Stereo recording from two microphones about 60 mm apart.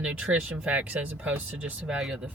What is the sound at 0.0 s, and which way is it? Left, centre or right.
Speech, right.